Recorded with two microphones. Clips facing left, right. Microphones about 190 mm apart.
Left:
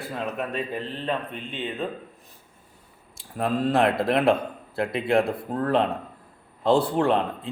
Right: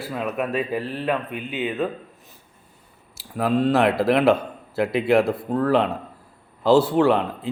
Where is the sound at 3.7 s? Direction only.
5° right (ahead or behind).